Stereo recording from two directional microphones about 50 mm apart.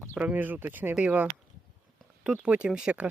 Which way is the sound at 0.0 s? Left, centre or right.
Right.